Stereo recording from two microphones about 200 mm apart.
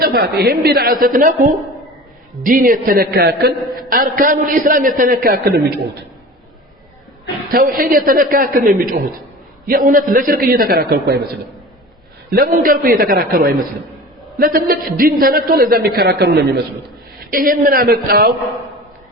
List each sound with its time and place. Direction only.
0.0 s a man's voice: 50° right (ahead or behind)
7.5 s a man's voice: 45° right (ahead or behind)